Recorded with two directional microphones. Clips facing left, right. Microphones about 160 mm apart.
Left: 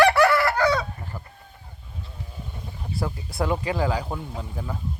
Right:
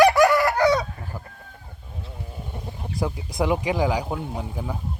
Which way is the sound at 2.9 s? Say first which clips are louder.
Right 2 dB; 15° right (ahead or behind).